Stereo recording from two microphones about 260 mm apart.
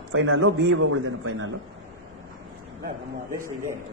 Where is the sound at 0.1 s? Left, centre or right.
Right.